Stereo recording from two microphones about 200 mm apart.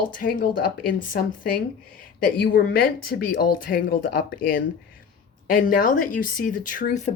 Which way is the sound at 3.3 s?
45° left (ahead or behind).